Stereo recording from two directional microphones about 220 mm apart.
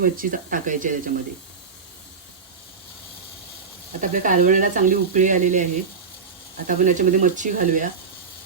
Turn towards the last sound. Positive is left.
turn(degrees=-35)  # may be behind; listen again after turning